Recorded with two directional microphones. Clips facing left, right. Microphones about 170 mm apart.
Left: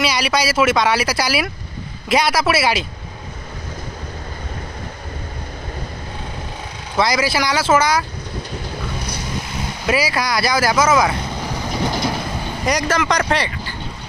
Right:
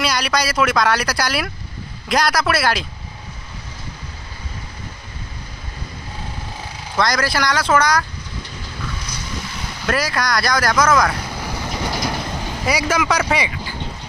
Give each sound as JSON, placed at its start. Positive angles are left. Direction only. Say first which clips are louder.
{"t": 0.0, "sound": "speech", "louder": "left 2 dB", "side_deg": 0}
{"t": 7.0, "sound": "speech", "louder": "left 1 dB", "side_deg": 5}
{"t": 9.8, "sound": "speech", "louder": "left 1 dB", "side_deg": 5}
{"t": 11.3, "sound": "vehicle", "louder": "left 2 dB", "side_deg": 20}
{"t": 12.6, "sound": "speech", "louder": "left 1 dB", "side_deg": -10}